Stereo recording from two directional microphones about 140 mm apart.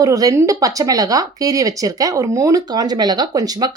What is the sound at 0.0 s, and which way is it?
A woman's voice, 25° right (ahead or behind).